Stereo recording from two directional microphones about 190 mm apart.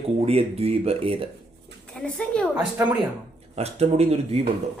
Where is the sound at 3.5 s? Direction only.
35° right (ahead or behind).